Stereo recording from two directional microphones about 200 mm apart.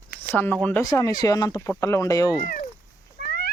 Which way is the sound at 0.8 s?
20° left (ahead or behind).